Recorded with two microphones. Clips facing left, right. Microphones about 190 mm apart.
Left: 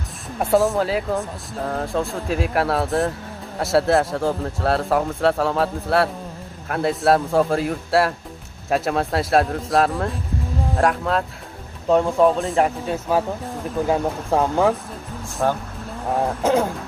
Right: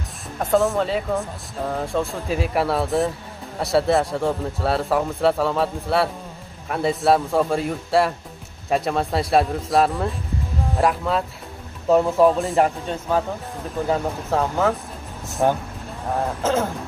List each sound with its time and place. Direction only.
0.4 s speech: 5° left (ahead or behind)
15.4 s speech: 15° right (ahead or behind)
16.4 s speech: 15° left (ahead or behind)